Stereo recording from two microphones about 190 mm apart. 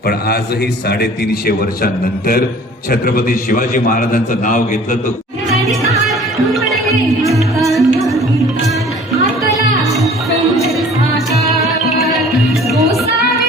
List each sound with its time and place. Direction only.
0.9 s a man's voice: 55° left (ahead or behind)
7.6 s music: centre (ahead or behind)
9.8 s music: centre (ahead or behind)
12.6 s music: 15° right (ahead or behind)